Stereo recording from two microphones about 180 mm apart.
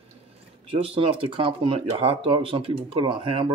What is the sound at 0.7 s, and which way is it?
Speech, 30° right (ahead or behind).